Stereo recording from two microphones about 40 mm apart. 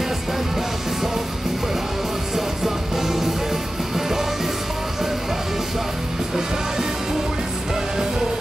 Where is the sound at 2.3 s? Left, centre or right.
Centre.